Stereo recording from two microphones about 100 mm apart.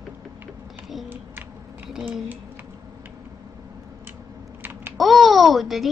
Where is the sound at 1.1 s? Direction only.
20° right (ahead or behind).